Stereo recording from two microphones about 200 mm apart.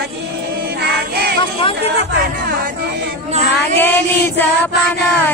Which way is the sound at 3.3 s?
35° right (ahead or behind).